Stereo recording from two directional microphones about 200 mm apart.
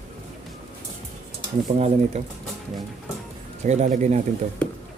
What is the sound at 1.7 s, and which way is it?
Speech, 35° right (ahead or behind).